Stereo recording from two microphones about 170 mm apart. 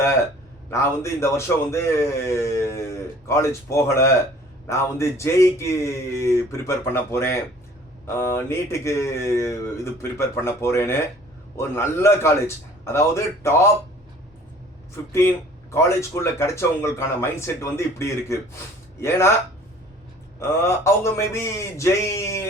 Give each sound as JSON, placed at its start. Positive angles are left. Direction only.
{"t": 0.7, "sound": "a man's voice", "side_deg": 15}
{"t": 15.7, "sound": "a man's voice", "side_deg": 15}
{"t": 20.4, "sound": "a man's voice", "side_deg": 15}